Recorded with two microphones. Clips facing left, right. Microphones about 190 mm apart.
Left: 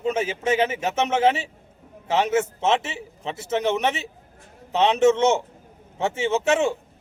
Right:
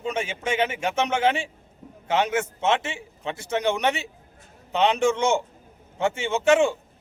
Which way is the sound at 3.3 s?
Centre (ahead or behind).